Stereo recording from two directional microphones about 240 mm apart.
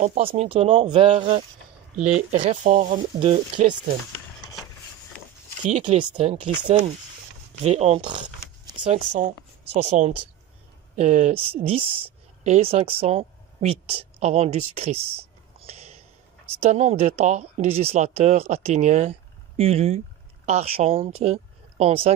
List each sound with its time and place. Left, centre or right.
0.0 s speech: right
2.4 s speech: right
5.7 s speech: right
7.6 s speech: right